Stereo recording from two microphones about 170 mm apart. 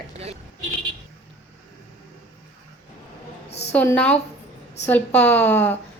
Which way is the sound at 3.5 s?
40° left (ahead or behind).